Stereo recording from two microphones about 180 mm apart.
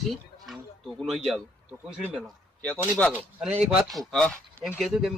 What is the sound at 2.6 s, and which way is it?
Speech, 5° left (ahead or behind).